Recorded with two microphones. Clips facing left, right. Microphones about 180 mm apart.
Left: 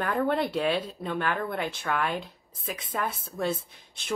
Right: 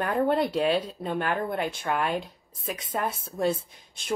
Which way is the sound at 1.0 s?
45° right (ahead or behind).